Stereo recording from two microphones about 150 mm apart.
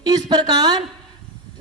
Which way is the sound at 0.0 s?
25° right (ahead or behind).